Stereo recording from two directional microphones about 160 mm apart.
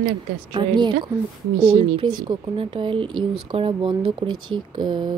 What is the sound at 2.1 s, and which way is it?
Speech, 30° right (ahead or behind).